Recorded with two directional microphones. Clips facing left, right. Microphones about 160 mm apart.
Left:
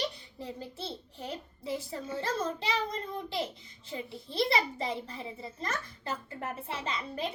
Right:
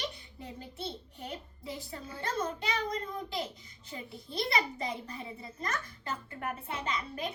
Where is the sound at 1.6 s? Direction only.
25° left (ahead or behind).